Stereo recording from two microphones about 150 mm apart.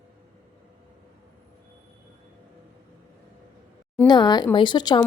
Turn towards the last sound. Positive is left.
turn(degrees=30)  # may be behind; listen again after turning